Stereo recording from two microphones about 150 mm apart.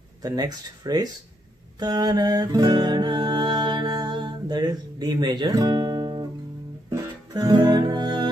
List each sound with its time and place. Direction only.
0.2 s speech: 25° right (ahead or behind)
1.8 s music: 25° right (ahead or behind)